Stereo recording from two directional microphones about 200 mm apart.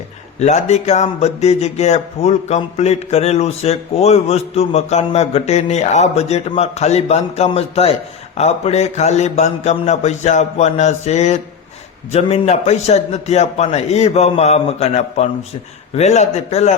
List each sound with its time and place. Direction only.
0.3 s speech: 35° left (ahead or behind)